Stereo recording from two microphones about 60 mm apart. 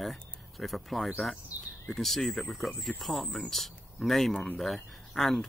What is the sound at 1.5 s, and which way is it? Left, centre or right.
Speech, right.